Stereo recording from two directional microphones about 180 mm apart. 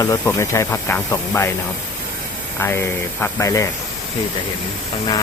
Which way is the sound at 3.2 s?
15° left (ahead or behind).